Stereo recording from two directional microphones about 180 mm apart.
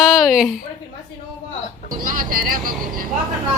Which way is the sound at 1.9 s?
50° right (ahead or behind).